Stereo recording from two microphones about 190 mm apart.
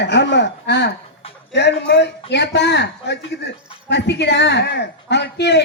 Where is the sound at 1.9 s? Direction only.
65° left (ahead or behind).